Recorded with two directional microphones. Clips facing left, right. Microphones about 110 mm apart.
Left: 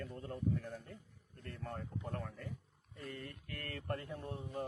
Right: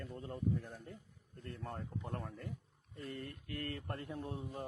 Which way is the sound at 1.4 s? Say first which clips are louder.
Right 1 dB; 30° right (ahead or behind).